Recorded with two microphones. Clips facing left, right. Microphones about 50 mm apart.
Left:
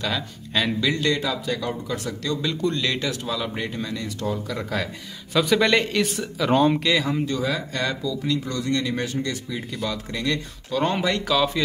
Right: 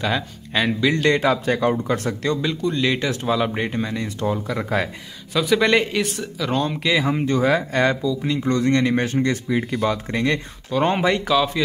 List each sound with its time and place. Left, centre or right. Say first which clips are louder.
0.0 s speech: right 4 dB; right
0.9 s speech: right 6 dB; right
2.7 s speech: right 4 dB; centre
3.1 s speech: right 6 dB; right
5.3 s speech: right 2 dB; centre
6.0 s speech: left 2 dB; centre
6.8 s speech: right 2 dB; centre
7.1 s speech: right 5 dB; right
8.0 s speech: right 3 dB; right
8.4 s speech: right 6 dB; right
11.2 s speech: right 2 dB; centre